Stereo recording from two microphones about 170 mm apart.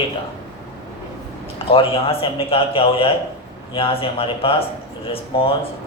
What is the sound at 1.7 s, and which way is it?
A man's voice, 35° left (ahead or behind).